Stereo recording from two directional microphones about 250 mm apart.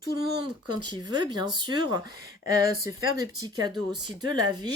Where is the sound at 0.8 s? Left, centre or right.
Centre.